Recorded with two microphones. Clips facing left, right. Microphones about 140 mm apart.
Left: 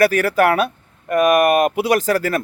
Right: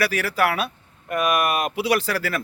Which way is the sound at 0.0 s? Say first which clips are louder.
Left 7 dB; 50° left (ahead or behind).